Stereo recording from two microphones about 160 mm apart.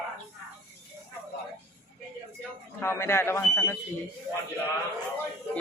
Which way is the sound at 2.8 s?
15° left (ahead or behind).